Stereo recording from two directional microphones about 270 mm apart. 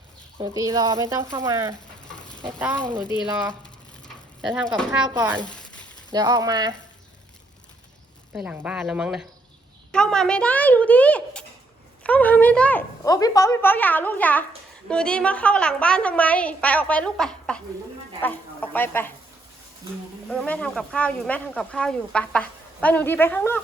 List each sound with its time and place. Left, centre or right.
0.3 s speech: centre
2.1 s stir: centre
2.6 s speech: centre
4.4 s speech: centre
5.0 s speech: centre
8.3 s a woman's voice: centre
20.3 s speech: centre